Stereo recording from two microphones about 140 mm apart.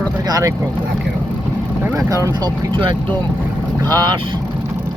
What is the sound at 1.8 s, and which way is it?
Speech, 25° right (ahead or behind).